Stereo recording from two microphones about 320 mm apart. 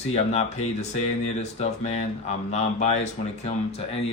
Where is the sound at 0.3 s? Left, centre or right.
Centre.